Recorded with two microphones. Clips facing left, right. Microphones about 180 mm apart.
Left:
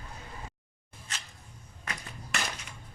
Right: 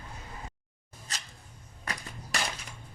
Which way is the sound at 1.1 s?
35° right (ahead or behind).